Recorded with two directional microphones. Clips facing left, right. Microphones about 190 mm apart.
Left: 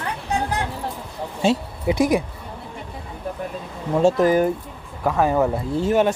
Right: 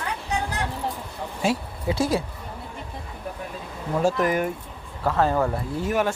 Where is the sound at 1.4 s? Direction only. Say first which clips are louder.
Left 5 dB; 20° left (ahead or behind).